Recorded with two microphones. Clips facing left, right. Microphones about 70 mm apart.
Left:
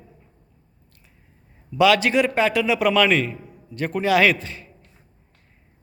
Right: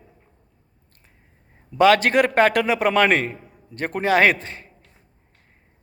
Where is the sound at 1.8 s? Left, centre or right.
Right.